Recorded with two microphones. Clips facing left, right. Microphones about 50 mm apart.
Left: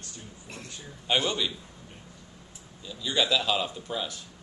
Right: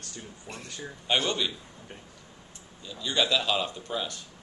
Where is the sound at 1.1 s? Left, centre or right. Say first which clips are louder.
Even; centre.